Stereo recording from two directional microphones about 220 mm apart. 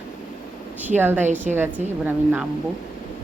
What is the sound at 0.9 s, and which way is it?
A woman's voice, 10° right (ahead or behind).